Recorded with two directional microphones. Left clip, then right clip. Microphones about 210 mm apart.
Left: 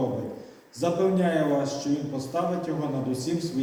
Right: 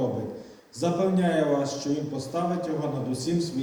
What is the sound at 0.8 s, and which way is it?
A man's voice, 25° right (ahead or behind).